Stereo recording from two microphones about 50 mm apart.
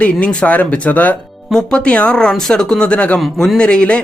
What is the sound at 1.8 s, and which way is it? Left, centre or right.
Speech, left.